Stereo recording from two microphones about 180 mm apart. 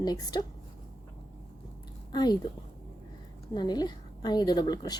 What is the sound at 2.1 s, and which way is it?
Speech, 20° left (ahead or behind).